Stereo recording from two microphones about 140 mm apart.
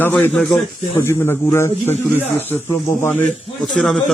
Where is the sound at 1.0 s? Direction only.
15° left (ahead or behind).